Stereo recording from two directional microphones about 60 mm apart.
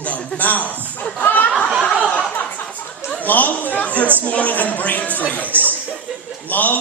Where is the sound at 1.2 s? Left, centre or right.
Left.